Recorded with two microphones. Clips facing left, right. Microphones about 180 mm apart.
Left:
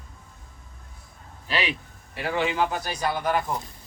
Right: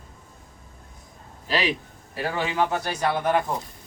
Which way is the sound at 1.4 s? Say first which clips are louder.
Right 3 dB; 40° right (ahead or behind).